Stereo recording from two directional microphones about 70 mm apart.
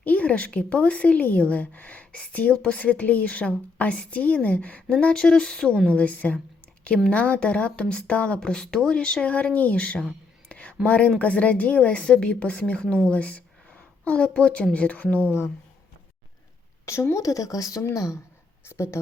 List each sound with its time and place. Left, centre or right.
0.0 s a woman's voice: centre
5.7 s a woman's voice: right
6.0 s a woman's voice: centre
10.5 s a sound: centre
10.8 s a woman's voice: centre
16.8 s speech: left
18.6 s speech: left